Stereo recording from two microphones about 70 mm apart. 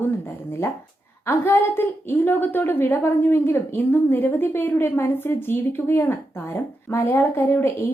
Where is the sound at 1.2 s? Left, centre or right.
Left.